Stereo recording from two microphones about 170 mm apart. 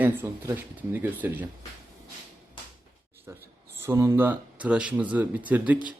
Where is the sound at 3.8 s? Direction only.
15° right (ahead or behind).